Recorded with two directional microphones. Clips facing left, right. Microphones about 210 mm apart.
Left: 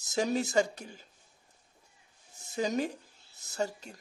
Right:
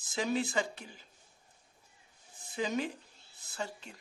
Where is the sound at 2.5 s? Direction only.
40° left (ahead or behind).